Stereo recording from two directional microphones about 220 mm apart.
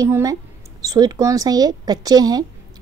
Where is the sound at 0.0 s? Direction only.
15° right (ahead or behind).